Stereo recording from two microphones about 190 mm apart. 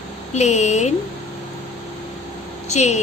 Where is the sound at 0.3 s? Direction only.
35° left (ahead or behind).